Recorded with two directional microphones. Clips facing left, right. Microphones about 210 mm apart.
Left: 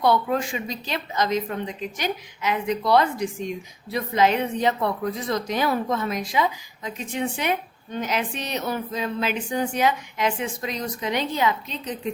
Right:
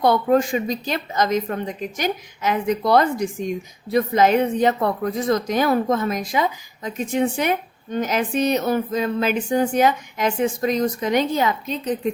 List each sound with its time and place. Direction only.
0.0 s speech: 45° right (ahead or behind)